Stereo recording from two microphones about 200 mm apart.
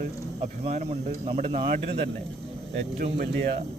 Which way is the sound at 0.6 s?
30° right (ahead or behind).